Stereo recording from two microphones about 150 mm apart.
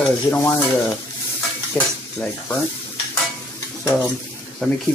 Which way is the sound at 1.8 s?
10° left (ahead or behind).